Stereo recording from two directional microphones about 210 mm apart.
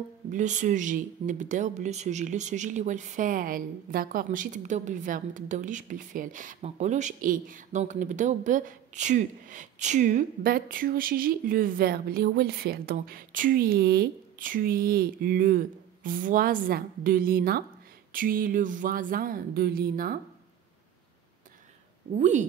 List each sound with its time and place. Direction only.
0.3 s speech: 35° right (ahead or behind)
18.1 s a sound: 40° right (ahead or behind)
22.1 s speech: 35° right (ahead or behind)